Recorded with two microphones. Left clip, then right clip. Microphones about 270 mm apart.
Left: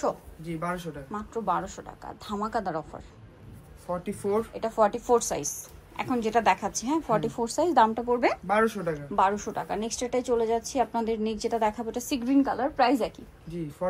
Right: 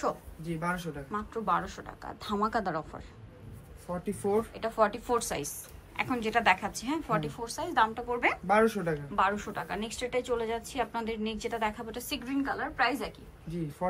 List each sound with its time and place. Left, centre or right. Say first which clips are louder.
0.4 s speech: left 1 dB; centre
1.1 s a woman's voice: left 1 dB; centre
4.0 s speech: even; centre
4.6 s a woman's voice: left 4 dB; centre
8.5 s speech: left 1 dB; centre
9.1 s a woman's voice: left 5 dB; centre
13.5 s speech: left 2 dB; centre